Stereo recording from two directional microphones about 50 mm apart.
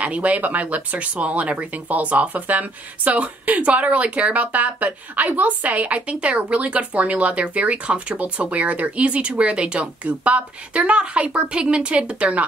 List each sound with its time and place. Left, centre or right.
0.0 s speech: right